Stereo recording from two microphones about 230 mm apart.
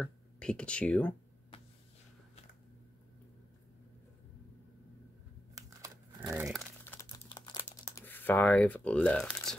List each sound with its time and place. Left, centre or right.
0.0 s speech: centre
5.5 s crumpling: centre
6.4 s speech: centre
6.8 s computer keyboard: centre
8.0 s speech: centre